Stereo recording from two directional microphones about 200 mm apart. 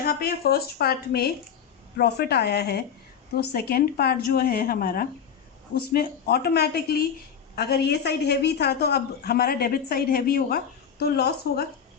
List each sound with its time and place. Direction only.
0.0 s a woman's voice: 50° left (ahead or behind)